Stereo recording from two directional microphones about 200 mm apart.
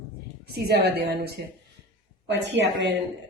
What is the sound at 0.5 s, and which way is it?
A woman's voice, 50° right (ahead or behind).